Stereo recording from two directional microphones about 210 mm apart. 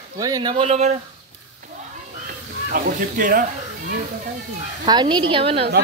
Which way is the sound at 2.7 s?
40° right (ahead or behind).